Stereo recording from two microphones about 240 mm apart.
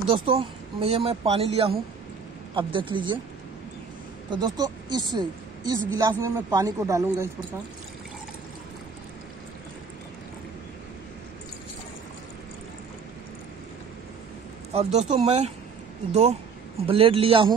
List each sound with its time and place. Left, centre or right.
0.1 s speech: right
4.3 s a woman's voice: centre
14.7 s speech: right